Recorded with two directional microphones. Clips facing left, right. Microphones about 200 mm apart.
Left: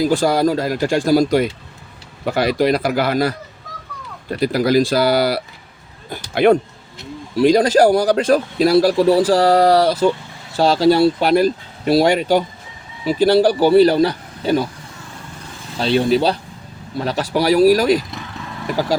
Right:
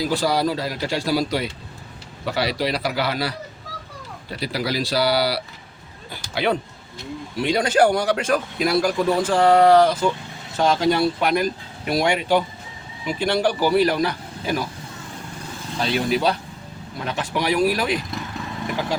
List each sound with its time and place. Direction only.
0.0 s speech: 50° left (ahead or behind)
7.3 s speech: 40° left (ahead or behind)
15.8 s speech: 30° left (ahead or behind)